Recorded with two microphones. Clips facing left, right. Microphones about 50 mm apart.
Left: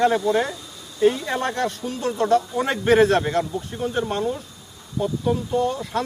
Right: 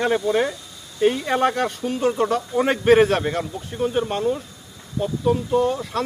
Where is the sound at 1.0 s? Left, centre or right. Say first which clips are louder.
Right 1 dB; right.